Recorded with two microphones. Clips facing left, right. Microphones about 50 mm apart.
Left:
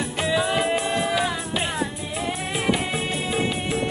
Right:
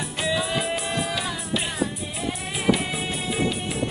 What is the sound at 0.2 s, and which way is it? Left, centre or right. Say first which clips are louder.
Music: left 3 dB; left.